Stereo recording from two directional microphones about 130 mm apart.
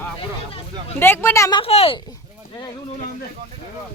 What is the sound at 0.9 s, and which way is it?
Speech, 15° left (ahead or behind).